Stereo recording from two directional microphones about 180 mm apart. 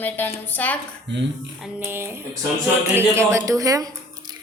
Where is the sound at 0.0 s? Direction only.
10° left (ahead or behind).